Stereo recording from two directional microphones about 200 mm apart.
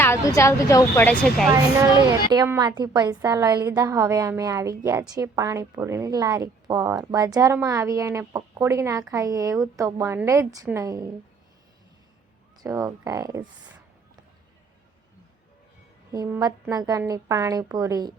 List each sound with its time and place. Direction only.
0.0 s speech: 15° left (ahead or behind)
1.8 s a woman's voice: 15° right (ahead or behind)
12.6 s a woman's voice: 15° right (ahead or behind)
16.1 s a woman's voice: 15° right (ahead or behind)